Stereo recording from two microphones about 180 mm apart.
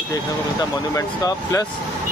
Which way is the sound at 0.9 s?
20° left (ahead or behind).